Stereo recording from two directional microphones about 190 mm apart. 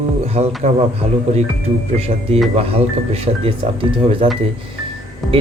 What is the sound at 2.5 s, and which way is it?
Speech, 30° right (ahead or behind).